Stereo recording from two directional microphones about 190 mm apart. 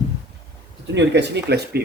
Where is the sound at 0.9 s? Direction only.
65° right (ahead or behind).